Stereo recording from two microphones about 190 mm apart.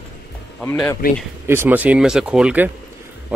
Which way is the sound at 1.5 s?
10° right (ahead or behind).